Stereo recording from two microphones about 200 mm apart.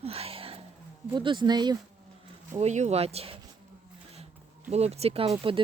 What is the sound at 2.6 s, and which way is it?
Speech, 35° right (ahead or behind).